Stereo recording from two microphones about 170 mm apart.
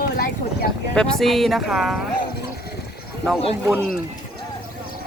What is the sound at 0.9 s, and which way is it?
Speech, 5° left (ahead or behind).